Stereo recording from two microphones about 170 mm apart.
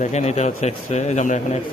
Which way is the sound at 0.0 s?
40° left (ahead or behind).